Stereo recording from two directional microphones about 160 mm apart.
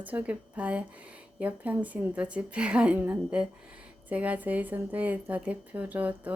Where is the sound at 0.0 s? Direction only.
10° right (ahead or behind).